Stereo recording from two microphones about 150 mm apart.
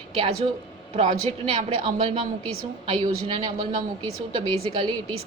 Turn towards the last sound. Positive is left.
turn(degrees=-35)  # may be behind; listen again after turning